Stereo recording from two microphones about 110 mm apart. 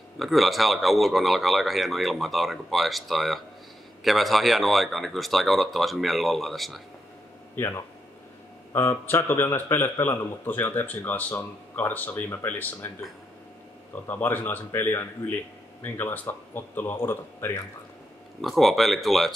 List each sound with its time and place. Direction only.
0.2 s speech: centre (ahead or behind)
7.5 s a man's voice: 25° left (ahead or behind)
14.0 s a man's voice: 20° left (ahead or behind)
18.4 s speech: centre (ahead or behind)